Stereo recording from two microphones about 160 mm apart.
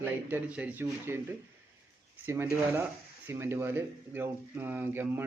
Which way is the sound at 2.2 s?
15° right (ahead or behind).